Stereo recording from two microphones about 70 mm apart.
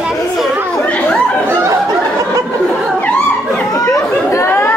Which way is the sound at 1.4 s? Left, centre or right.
Right.